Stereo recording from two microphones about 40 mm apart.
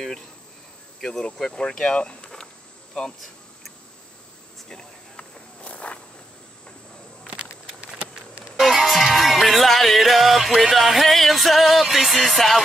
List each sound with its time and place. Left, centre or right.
1.2 s speech: centre
2.3 s insect: centre
4.6 s walk: left
7.4 s a sound: right
8.5 s music: centre